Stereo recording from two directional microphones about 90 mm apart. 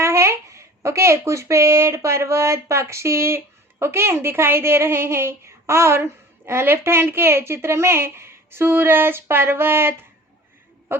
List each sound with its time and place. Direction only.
0.0 s speech: 30° right (ahead or behind)